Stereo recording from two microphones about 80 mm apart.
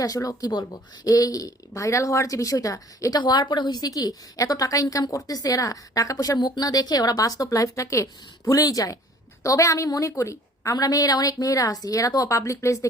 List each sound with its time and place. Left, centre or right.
0.0 s a woman's voice: left
3.2 s a woman's voice: left